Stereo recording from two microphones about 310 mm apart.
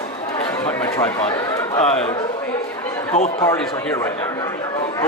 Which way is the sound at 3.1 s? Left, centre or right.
Left.